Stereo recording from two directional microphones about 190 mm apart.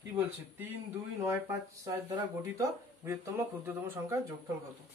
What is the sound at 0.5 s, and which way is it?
Speech, 10° right (ahead or behind).